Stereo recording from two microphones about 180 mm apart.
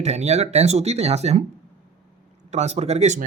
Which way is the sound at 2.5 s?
40° right (ahead or behind).